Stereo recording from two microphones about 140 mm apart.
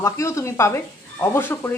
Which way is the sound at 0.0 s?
20° left (ahead or behind).